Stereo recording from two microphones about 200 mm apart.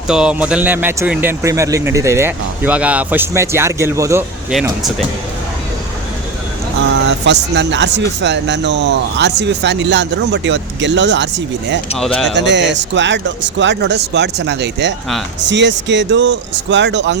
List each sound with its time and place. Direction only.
0.1 s speech: 5° right (ahead or behind)
6.9 s speech: 65° right (ahead or behind)
11.9 s speech: centre (ahead or behind)
12.3 s speech: 60° right (ahead or behind)